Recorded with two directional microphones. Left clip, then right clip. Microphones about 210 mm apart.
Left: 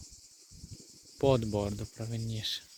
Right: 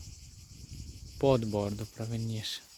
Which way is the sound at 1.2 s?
5° right (ahead or behind).